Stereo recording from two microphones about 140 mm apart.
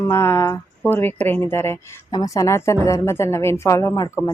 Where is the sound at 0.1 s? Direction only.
20° left (ahead or behind).